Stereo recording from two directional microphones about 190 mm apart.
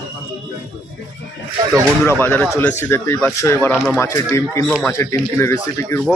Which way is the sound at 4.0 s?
15° left (ahead or behind).